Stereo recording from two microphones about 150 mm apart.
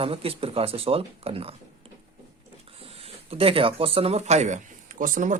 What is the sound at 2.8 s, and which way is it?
Speech, 40° right (ahead or behind).